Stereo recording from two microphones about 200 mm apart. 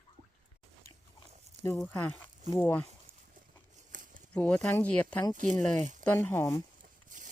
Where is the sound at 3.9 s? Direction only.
40° right (ahead or behind).